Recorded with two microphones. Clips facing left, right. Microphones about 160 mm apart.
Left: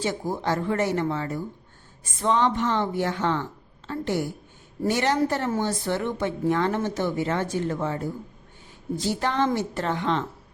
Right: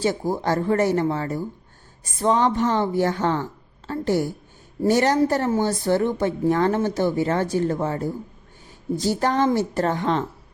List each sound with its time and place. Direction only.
0.0 s speech: 40° right (ahead or behind)